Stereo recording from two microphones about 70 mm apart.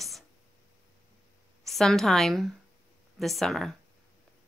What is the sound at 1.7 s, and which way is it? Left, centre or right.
A woman's voice, centre.